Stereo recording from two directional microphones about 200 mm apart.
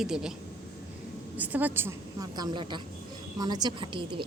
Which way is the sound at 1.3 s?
10° right (ahead or behind).